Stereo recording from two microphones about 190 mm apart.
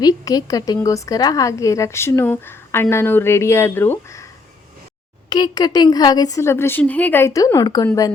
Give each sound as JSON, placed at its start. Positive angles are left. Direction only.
{"t": 0.0, "sound": "a woman's voice", "side_deg": 20}
{"t": 5.3, "sound": "a woman's voice", "side_deg": 20}